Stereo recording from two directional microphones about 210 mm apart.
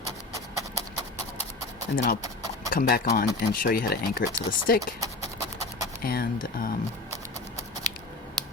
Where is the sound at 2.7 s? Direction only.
45° left (ahead or behind).